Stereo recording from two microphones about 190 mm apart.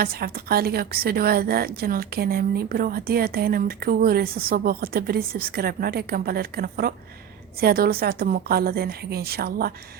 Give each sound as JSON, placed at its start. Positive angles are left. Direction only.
{"t": 0.0, "sound": "a woman's voice", "side_deg": -50}